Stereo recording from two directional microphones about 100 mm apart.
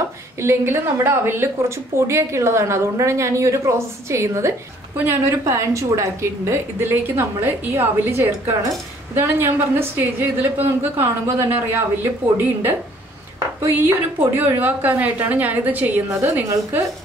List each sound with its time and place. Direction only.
0.4 s a woman's voice: 25° right (ahead or behind)
16.1 s a woman's voice: 30° right (ahead or behind)